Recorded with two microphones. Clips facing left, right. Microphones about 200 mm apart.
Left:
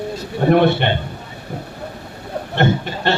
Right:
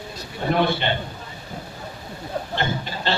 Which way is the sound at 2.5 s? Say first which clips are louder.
Left 11 dB; 65° left (ahead or behind).